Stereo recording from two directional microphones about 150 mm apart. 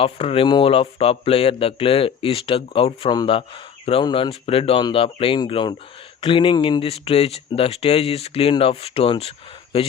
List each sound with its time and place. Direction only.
0.0 s speech: 40° left (ahead or behind)